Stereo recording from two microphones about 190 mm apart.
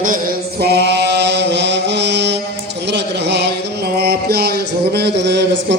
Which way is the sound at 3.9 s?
55° right (ahead or behind).